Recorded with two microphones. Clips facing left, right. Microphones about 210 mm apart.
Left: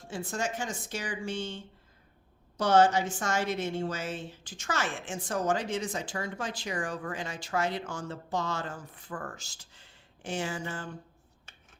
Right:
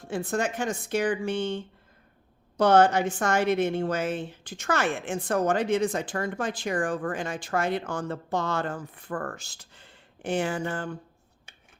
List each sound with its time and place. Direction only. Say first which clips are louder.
0.0 s a woman's voice: right 6 dB; 60° right (ahead or behind)